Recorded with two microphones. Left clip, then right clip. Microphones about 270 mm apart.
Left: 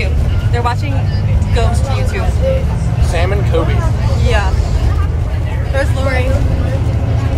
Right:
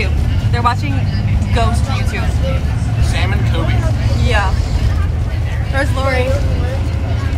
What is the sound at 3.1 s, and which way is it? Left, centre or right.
Speech, left.